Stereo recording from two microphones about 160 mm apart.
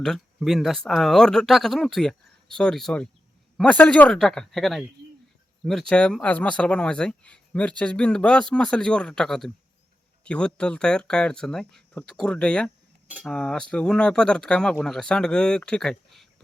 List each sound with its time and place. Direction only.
0.0 s speech: centre (ahead or behind)